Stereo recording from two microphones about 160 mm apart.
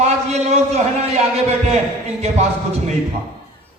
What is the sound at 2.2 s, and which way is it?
Speech, 45° right (ahead or behind).